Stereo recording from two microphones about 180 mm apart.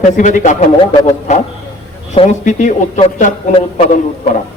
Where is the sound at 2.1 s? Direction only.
45° left (ahead or behind).